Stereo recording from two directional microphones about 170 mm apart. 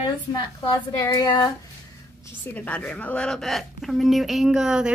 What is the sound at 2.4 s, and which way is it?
A woman's voice, 10° left (ahead or behind).